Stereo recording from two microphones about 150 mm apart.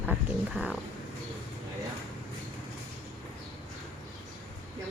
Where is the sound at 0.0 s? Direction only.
10° right (ahead or behind).